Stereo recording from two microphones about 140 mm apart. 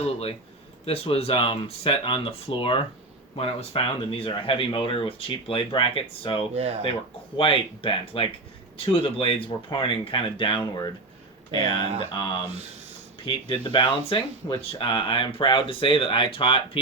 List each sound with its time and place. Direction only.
0.0 s speech: 45° left (ahead or behind)
6.6 s speech: 50° right (ahead or behind)
7.3 s speech: 40° left (ahead or behind)
12.1 s speech: 35° left (ahead or behind)